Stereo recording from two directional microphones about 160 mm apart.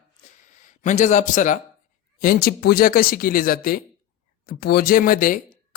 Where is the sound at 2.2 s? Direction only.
70° left (ahead or behind).